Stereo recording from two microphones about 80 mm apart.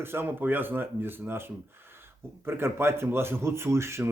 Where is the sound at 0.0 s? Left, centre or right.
Right.